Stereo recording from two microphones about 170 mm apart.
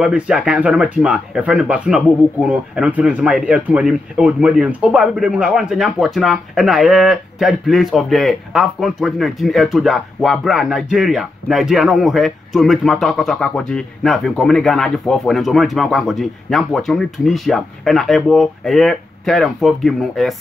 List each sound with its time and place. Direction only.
0.0 s speech: 5° right (ahead or behind)